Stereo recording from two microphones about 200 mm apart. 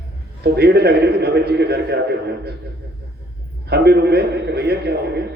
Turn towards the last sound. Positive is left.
turn(degrees=-55)  # may be behind; listen again after turning